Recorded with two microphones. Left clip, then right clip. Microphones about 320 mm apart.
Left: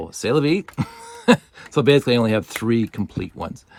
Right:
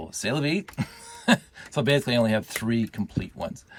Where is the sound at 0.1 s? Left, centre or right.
Centre.